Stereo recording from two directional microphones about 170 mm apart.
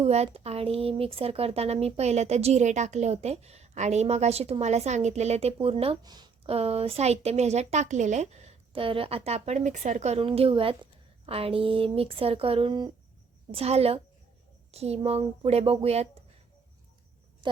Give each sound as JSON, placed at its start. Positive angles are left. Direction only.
{"t": 0.0, "sound": "speech", "side_deg": -40}